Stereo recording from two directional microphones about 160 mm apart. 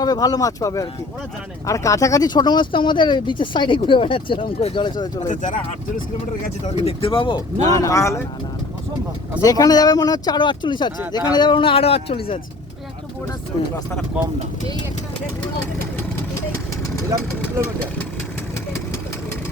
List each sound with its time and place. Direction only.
0.0 s speech: 25° left (ahead or behind)
5.3 s speech: 50° left (ahead or behind)
6.7 s speech: 40° left (ahead or behind)
7.7 s speech: 20° left (ahead or behind)
9.4 s speech: 25° left (ahead or behind)